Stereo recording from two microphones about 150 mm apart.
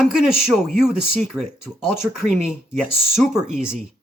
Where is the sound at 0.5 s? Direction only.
5° right (ahead or behind).